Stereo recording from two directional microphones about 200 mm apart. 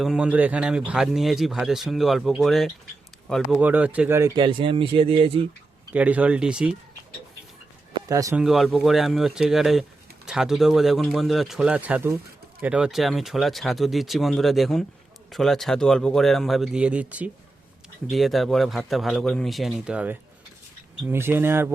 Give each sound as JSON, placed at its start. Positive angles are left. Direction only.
{"t": 0.0, "sound": "speech", "side_deg": -5}
{"t": 5.9, "sound": "speech", "side_deg": -5}
{"t": 8.0, "sound": "speech", "side_deg": -15}
{"t": 8.4, "sound": "speech", "side_deg": 0}